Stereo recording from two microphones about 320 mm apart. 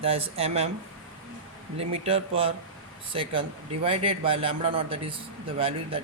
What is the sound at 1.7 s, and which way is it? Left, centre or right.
A man's voice, centre.